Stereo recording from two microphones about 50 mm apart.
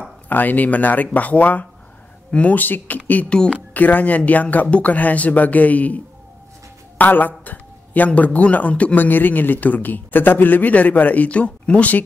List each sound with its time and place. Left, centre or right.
0.3 s a man's voice: left
2.6 s a man's voice: left
3.3 s speech: centre
3.7 s a man's voice: left